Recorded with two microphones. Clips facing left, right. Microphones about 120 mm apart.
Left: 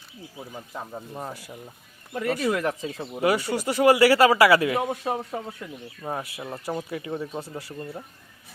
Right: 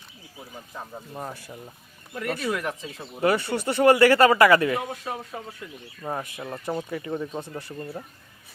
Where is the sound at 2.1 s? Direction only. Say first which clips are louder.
Left 3 dB; 15° left (ahead or behind).